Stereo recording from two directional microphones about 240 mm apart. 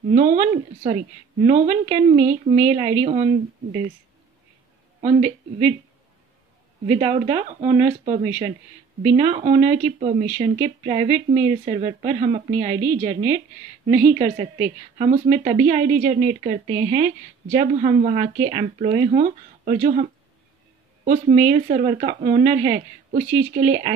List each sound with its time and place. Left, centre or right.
0.1 s a woman's voice: right
5.0 s a woman's voice: right
6.9 s a woman's voice: right